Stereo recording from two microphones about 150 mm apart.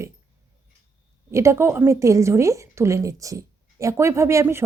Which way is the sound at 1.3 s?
20° right (ahead or behind).